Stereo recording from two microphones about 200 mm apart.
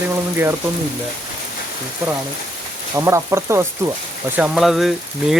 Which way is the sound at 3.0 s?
15° right (ahead or behind).